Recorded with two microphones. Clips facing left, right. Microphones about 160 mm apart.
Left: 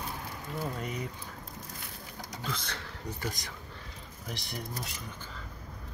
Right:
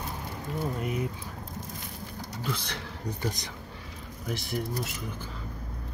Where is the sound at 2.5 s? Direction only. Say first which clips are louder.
Right 3 dB; 15° right (ahead or behind).